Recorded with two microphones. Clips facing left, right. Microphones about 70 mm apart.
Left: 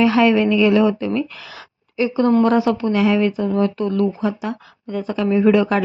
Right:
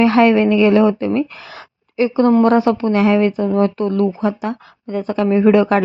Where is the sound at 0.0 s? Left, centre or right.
Right.